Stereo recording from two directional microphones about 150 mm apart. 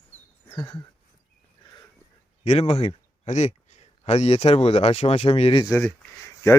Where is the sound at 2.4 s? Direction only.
40° left (ahead or behind).